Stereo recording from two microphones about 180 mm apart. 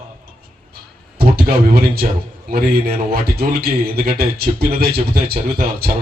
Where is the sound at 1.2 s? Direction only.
60° right (ahead or behind).